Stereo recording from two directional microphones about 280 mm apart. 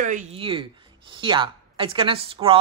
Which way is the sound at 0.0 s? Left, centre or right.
Right.